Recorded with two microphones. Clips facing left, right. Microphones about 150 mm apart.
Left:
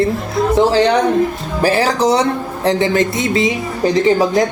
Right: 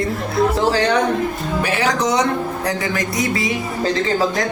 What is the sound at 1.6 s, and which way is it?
A man's voice, 35° left (ahead or behind).